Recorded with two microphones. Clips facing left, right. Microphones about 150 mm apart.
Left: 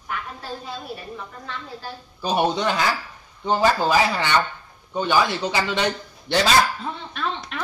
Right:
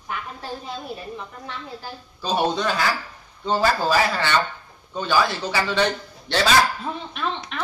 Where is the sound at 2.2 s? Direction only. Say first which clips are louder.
Left 1 dB; 15° left (ahead or behind).